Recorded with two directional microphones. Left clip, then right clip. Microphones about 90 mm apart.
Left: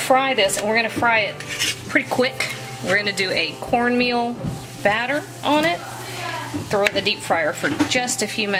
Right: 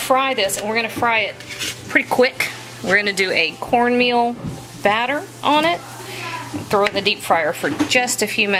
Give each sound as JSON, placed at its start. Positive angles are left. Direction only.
{"t": 0.1, "sound": "a woman's voice", "side_deg": -35}